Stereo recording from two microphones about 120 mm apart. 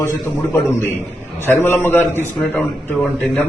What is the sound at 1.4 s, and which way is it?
A man's voice, 20° left (ahead or behind).